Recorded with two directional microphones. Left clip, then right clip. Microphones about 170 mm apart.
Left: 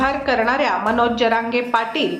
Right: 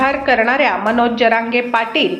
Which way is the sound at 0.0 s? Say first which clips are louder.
Right 4 dB; 10° right (ahead or behind).